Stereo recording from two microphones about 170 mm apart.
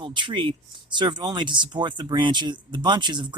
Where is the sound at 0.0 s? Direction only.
30° right (ahead or behind).